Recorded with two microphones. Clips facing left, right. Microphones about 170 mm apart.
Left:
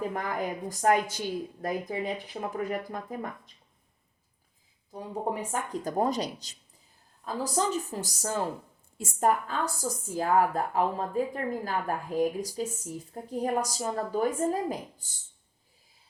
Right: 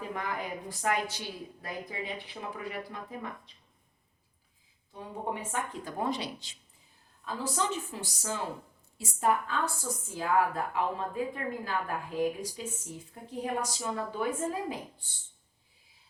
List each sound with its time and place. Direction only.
0.1 s speech: 45° left (ahead or behind)
4.9 s a woman's voice: 40° left (ahead or behind)